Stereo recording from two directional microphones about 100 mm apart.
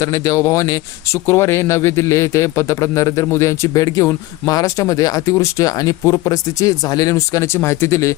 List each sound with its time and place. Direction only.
0.0 s speech: 35° left (ahead or behind)